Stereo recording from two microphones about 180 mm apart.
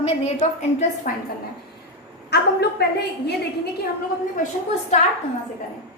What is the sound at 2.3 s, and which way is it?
Speech, 65° left (ahead or behind).